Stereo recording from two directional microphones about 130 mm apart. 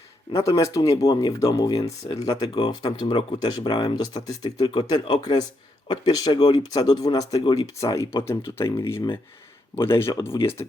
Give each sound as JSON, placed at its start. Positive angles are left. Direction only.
{"t": 0.3, "sound": "speech", "side_deg": 25}